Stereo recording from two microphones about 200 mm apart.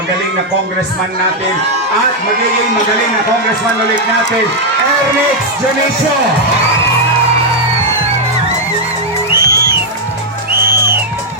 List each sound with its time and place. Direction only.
9.4 s music: 50° right (ahead or behind)